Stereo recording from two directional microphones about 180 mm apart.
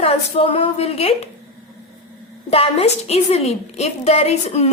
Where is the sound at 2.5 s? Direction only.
35° left (ahead or behind).